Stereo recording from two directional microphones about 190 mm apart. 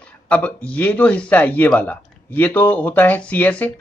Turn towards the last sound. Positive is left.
turn(degrees=10)  # may be behind; listen again after turning